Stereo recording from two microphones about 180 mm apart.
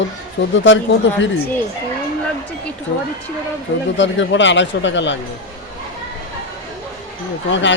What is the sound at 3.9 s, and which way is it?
Speech, 90° left.